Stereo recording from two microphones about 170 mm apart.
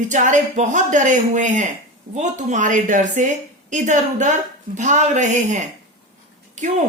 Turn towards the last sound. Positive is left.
turn(degrees=-45)  # may be behind; listen again after turning